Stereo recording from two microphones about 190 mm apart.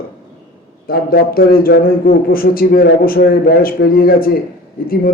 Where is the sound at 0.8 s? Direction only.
50° left (ahead or behind).